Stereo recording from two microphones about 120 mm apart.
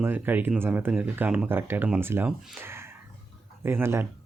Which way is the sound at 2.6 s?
20° right (ahead or behind).